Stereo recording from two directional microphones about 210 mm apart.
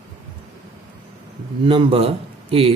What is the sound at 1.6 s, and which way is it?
A man's voice, 25° right (ahead or behind).